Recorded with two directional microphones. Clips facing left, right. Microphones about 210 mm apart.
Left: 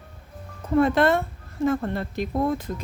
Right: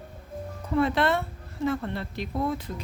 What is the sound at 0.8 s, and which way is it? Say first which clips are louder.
Speech: left 5 dB; 45° left (ahead or behind).